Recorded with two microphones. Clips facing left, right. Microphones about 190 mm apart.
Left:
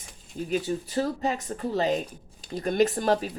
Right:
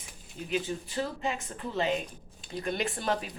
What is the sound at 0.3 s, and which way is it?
Speech, 40° left (ahead or behind).